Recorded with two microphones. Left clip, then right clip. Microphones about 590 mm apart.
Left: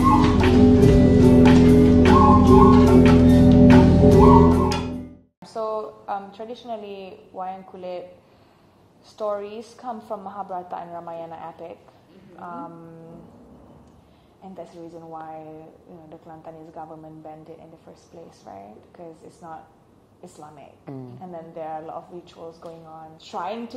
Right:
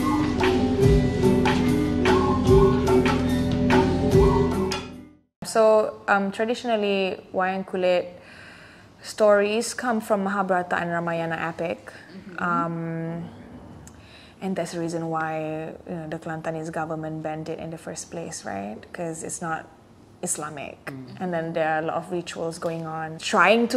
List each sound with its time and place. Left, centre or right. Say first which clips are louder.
0.0 s music: left 5 dB; centre
5.4 s a woman's voice: right 10 dB; right
9.5 s speech: right 9 dB; right
16.1 s speech: right 10 dB; right
20.2 s a woman's voice: right 11 dB; right
21.3 s a woman's voice: right 9 dB; right